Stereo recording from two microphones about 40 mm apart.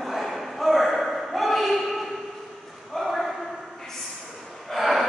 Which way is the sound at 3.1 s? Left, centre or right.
Centre.